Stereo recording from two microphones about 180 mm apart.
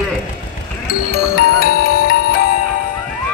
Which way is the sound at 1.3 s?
55° left (ahead or behind).